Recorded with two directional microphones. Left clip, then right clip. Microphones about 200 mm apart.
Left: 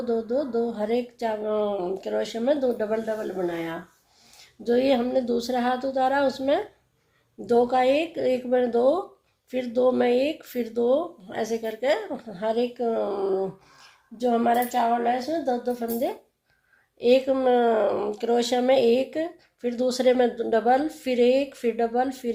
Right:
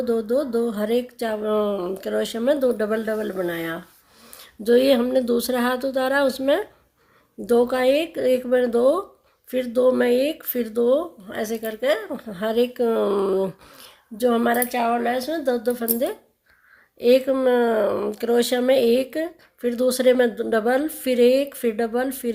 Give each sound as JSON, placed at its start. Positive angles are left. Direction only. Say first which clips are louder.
{"t": 0.0, "sound": "speech", "louder": "right 4 dB", "side_deg": -45}